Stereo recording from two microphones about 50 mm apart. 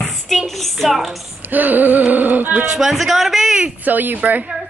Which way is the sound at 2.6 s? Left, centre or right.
Centre.